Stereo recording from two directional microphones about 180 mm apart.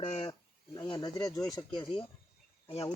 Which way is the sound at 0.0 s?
35° left (ahead or behind).